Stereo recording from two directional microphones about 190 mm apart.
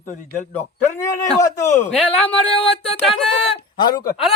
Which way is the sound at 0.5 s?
15° left (ahead or behind).